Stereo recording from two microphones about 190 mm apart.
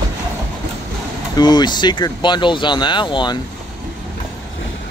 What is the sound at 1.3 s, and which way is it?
Speech, 20° left (ahead or behind).